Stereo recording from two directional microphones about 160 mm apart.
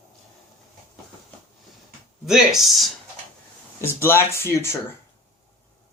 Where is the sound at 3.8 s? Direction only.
15° left (ahead or behind).